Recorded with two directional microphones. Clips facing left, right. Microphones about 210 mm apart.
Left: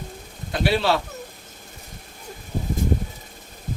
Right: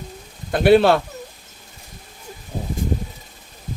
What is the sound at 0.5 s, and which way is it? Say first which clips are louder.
Speech: right 8 dB; 50° right (ahead or behind).